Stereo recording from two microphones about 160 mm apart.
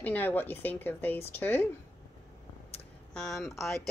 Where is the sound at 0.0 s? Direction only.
10° left (ahead or behind).